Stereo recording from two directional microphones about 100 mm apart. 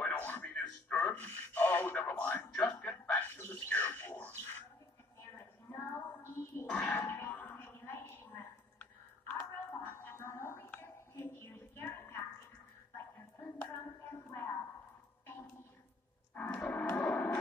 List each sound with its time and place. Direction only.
0.0 s radio: 15° left (ahead or behind)
3.3 s a sound: 20° left (ahead or behind)
6.7 s music: 15° left (ahead or behind)
7.0 s a sound: 25° left (ahead or behind)
12.9 s hands: 20° left (ahead or behind)
16.3 s music: 10° left (ahead or behind)